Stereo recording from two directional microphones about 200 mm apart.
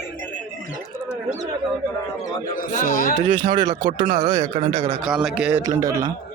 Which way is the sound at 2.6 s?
45° left (ahead or behind).